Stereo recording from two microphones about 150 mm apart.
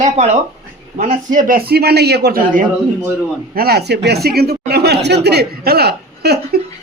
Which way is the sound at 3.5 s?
90° right.